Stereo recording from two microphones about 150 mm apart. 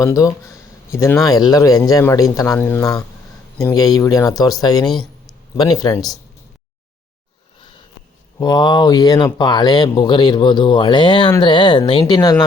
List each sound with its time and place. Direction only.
0.0 s speech: 20° left (ahead or behind)
8.4 s speech: 25° left (ahead or behind)